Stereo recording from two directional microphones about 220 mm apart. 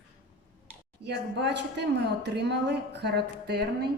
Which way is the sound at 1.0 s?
50° right (ahead or behind).